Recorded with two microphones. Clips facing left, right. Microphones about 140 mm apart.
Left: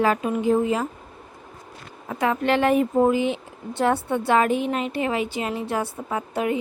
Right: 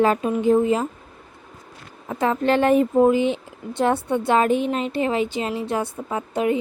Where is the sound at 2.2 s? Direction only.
35° right (ahead or behind).